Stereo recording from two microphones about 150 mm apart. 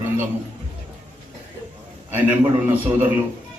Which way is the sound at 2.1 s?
15° right (ahead or behind).